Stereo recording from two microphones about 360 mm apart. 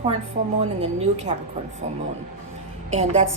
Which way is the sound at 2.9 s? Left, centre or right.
Centre.